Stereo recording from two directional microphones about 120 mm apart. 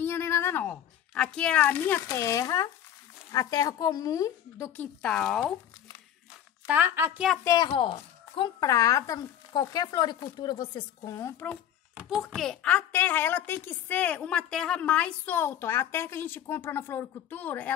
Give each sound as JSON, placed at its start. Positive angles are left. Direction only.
{"t": 0.0, "sound": "a sound", "side_deg": 20}
{"t": 1.1, "sound": "a woman's voice", "side_deg": 5}
{"t": 4.7, "sound": "speech", "side_deg": 5}
{"t": 6.7, "sound": "a woman's voice", "side_deg": -15}
{"t": 7.4, "sound": "speech", "side_deg": 35}
{"t": 7.7, "sound": "speech", "side_deg": 45}
{"t": 8.6, "sound": "speech", "side_deg": 30}
{"t": 12.1, "sound": "a woman's voice", "side_deg": 0}